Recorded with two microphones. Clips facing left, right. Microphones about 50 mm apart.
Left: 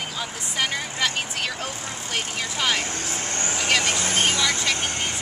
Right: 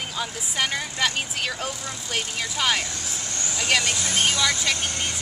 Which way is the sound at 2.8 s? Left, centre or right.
Left.